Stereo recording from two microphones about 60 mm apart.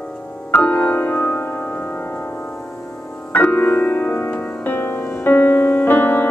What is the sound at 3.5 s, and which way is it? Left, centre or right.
Music, left.